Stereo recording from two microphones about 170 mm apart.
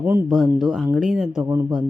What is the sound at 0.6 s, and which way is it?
Speech, 5° right (ahead or behind).